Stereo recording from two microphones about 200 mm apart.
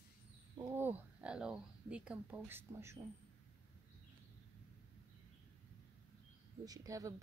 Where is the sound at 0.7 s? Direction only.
10° right (ahead or behind).